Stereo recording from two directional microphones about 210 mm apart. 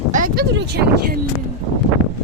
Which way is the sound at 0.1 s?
45° right (ahead or behind).